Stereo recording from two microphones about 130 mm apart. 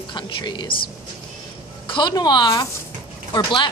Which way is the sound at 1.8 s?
40° left (ahead or behind).